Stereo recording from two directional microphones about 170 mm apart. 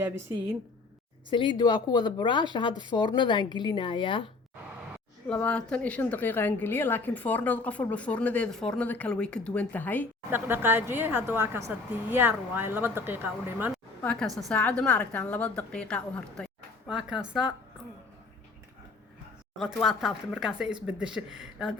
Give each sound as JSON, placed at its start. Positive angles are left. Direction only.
{"t": 0.0, "sound": "a woman's voice", "side_deg": -15}
{"t": 1.3, "sound": "a woman's voice", "side_deg": 30}
{"t": 5.3, "sound": "a woman's voice", "side_deg": 5}
{"t": 10.3, "sound": "a woman's voice", "side_deg": -10}
{"t": 14.0, "sound": "a woman's voice", "side_deg": 5}
{"t": 19.5, "sound": "speech", "side_deg": 0}